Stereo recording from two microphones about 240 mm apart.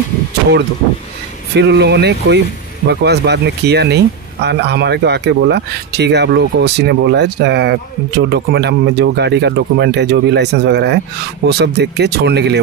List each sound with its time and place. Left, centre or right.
1.5 s speech: right